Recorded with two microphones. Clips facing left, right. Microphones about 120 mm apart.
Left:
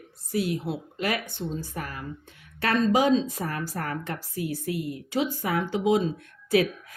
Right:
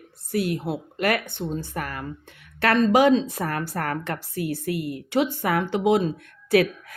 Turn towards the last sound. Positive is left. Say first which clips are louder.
# right 3 dB
turn(degrees=-65)  # may be behind; listen again after turning